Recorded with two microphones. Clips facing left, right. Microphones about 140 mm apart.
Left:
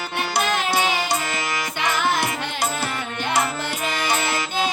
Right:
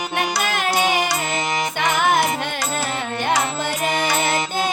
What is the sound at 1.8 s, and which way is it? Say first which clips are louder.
Music: right 3 dB; 55° right (ahead or behind).